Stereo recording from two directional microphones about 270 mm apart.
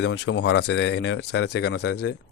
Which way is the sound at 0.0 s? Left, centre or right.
Left.